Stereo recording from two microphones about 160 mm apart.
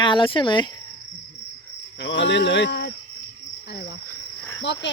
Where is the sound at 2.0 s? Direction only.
90° left.